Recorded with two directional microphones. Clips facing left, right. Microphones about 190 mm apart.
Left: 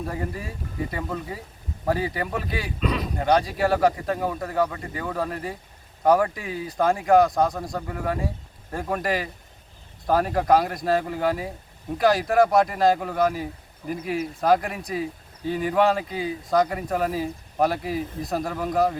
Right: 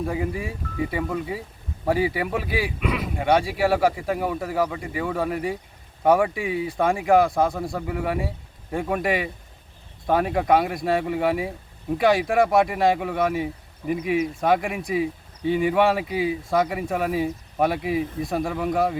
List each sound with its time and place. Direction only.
0.1 s speech: 5° right (ahead or behind)